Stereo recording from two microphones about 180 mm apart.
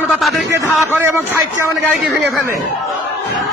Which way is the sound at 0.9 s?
15° right (ahead or behind).